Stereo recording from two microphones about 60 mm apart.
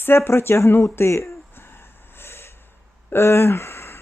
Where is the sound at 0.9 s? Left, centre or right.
Left.